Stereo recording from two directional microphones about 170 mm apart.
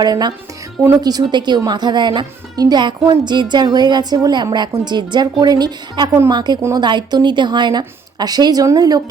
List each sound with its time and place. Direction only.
0.0 s a woman's voice: 25° right (ahead or behind)